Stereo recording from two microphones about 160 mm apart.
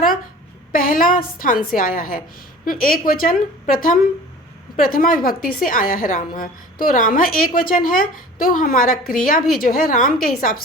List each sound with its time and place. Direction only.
0.7 s a woman's voice: 60° left (ahead or behind)